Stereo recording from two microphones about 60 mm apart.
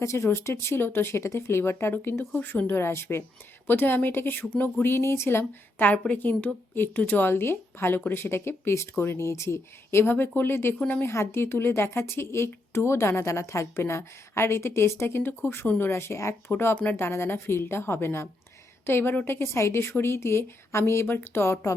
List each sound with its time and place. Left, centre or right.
0.0 s a woman's voice: left
5.8 s a woman's voice: left
9.9 s a woman's voice: left
16.7 s a woman's voice: left
17.0 s a woman's voice: left